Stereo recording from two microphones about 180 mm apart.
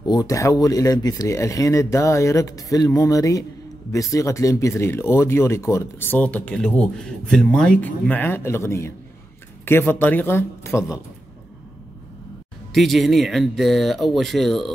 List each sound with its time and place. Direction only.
0.0 s speech: 20° left (ahead or behind)
12.7 s speech: centre (ahead or behind)